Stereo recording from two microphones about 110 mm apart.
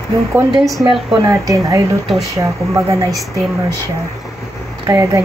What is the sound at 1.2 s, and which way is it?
Speech, 30° right (ahead or behind).